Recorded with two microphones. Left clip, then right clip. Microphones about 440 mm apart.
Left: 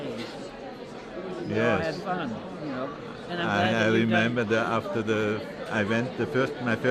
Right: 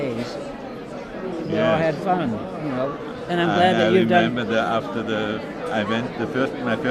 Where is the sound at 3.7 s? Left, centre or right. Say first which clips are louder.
Right 7 dB; left.